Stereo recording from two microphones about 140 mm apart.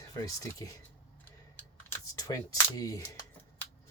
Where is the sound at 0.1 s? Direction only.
25° left (ahead or behind).